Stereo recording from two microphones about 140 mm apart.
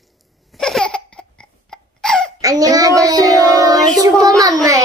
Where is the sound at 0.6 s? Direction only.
5° left (ahead or behind).